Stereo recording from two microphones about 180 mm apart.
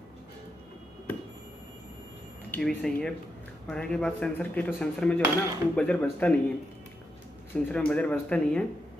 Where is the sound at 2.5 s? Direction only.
5° left (ahead or behind).